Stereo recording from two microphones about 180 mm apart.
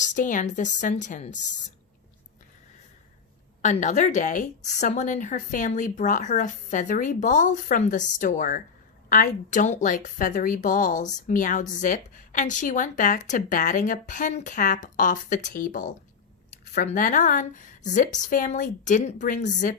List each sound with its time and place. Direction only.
0.0 s a woman's voice: 45° left (ahead or behind)
3.6 s a woman's voice: 40° left (ahead or behind)